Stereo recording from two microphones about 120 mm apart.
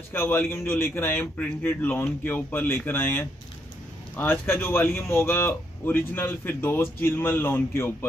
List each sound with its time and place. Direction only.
0.1 s speech: 20° left (ahead or behind)